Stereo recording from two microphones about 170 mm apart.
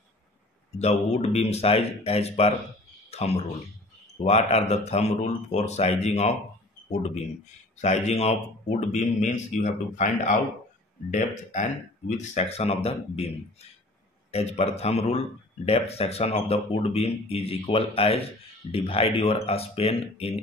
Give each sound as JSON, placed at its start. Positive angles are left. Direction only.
{"t": 0.7, "sound": "speech", "side_deg": 40}
{"t": 7.8, "sound": "speech", "side_deg": 40}